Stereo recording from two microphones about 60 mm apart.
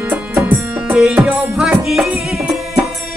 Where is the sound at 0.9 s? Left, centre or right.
Centre.